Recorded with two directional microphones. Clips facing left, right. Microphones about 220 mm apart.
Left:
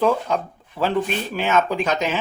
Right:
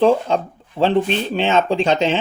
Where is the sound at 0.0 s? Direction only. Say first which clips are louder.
Right 5 dB; 30° right (ahead or behind).